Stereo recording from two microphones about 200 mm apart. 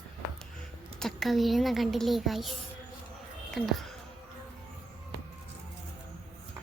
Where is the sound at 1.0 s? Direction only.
Centre (ahead or behind).